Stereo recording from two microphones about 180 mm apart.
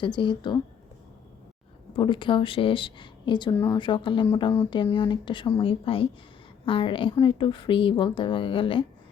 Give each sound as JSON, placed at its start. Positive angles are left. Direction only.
{"t": 0.0, "sound": "a woman's voice", "side_deg": 25}
{"t": 2.0, "sound": "a woman's voice", "side_deg": 25}